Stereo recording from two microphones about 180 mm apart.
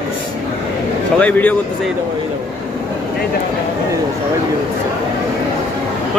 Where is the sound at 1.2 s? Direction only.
10° left (ahead or behind).